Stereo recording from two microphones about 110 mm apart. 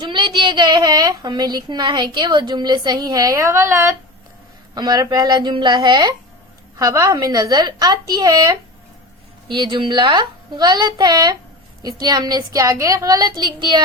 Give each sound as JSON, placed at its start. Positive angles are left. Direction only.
{"t": 0.0, "sound": "a woman's voice", "side_deg": -45}
{"t": 4.7, "sound": "speech", "side_deg": -40}
{"t": 6.7, "sound": "a woman's voice", "side_deg": -30}
{"t": 9.5, "sound": "a woman's voice", "side_deg": -50}